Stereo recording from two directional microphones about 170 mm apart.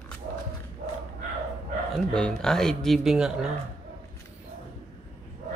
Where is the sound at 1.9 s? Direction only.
5° left (ahead or behind).